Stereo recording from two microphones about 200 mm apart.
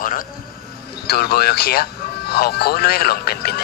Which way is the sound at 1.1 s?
50° left (ahead or behind).